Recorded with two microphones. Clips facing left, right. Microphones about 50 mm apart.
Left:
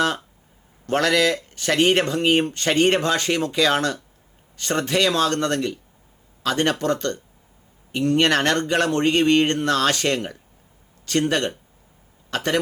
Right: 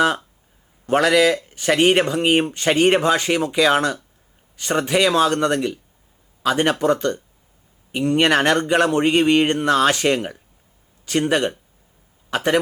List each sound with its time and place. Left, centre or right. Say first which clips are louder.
0.9 s speech: right 4 dB; centre